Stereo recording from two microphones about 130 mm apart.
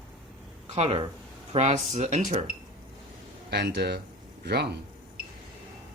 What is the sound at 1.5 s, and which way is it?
Speech, 60° right (ahead or behind).